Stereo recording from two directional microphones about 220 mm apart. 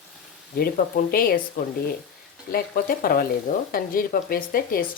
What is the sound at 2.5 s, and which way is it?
Speech, 40° left (ahead or behind).